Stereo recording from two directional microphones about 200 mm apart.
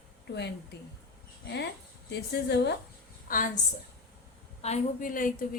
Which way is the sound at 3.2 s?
45° left (ahead or behind).